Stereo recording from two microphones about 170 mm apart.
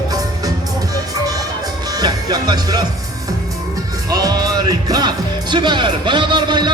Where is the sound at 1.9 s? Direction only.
25° right (ahead or behind).